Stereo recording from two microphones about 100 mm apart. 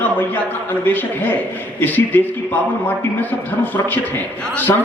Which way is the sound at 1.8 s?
20° left (ahead or behind).